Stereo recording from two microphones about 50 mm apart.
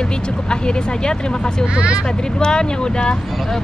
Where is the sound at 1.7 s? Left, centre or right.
Centre.